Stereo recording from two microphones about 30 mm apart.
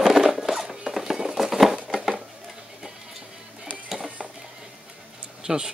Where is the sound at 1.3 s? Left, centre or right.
Centre.